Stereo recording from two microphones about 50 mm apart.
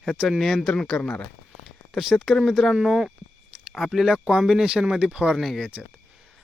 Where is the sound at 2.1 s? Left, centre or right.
Left.